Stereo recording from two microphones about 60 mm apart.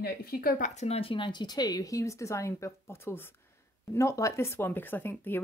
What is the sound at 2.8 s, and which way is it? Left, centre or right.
Speech, left.